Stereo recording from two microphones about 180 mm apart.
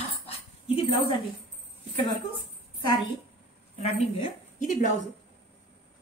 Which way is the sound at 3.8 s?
35° left (ahead or behind).